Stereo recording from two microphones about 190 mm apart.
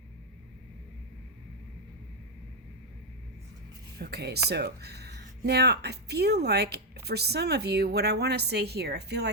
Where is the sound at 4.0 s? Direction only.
60° right (ahead or behind).